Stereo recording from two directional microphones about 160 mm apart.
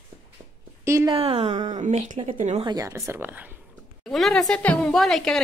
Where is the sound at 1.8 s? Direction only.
50° right (ahead or behind).